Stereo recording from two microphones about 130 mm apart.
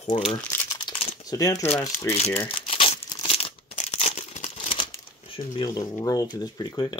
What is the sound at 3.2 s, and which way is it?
Tearing, 50° left (ahead or behind).